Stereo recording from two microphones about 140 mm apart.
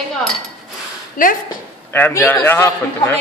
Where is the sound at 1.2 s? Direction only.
75° left (ahead or behind).